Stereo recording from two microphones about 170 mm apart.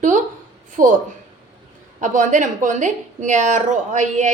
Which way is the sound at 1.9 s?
45° right (ahead or behind).